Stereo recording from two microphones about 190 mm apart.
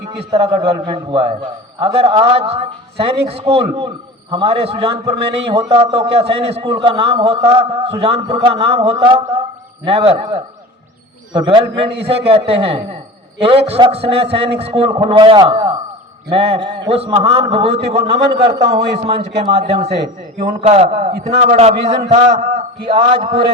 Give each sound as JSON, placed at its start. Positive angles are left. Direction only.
{"t": 0.4, "sound": "a woman's voice", "side_deg": -25}
{"t": 11.3, "sound": "a woman's voice", "side_deg": -25}